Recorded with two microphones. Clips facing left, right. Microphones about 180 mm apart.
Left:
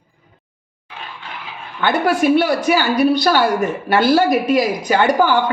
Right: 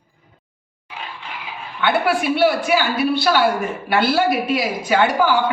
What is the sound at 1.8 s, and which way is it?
A woman's voice, 40° left (ahead or behind).